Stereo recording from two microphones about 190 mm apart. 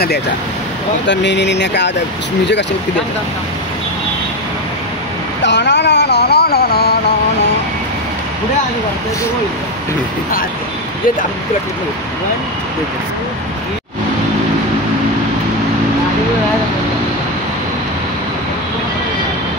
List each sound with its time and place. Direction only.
1.0 s speech: 65° left (ahead or behind)
5.4 s vehicle: 65° left (ahead or behind)